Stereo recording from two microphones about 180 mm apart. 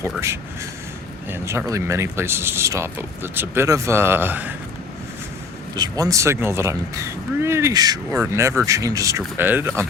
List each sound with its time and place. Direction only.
0.0 s speech: 15° right (ahead or behind)
5.7 s speech: 20° right (ahead or behind)